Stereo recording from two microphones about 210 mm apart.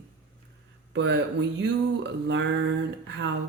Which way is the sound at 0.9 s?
60° right (ahead or behind).